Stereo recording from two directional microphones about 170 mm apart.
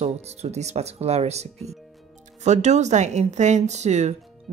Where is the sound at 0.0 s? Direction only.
40° right (ahead or behind).